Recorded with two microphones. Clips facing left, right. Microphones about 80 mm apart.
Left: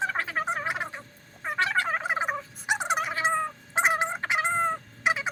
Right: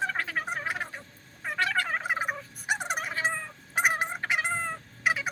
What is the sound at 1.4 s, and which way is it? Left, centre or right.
Gobble, left.